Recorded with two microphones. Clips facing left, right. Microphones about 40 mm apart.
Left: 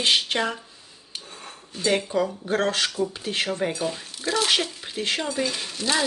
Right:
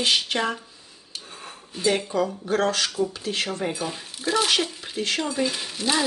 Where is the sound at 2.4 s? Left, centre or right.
Left.